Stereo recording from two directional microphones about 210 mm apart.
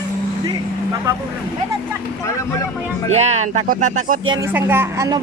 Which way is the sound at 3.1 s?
30° right (ahead or behind).